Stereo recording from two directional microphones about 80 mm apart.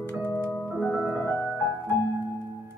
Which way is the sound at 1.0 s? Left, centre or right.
Centre.